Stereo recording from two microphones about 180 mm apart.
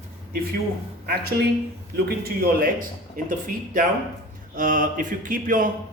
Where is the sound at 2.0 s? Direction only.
60° right (ahead or behind).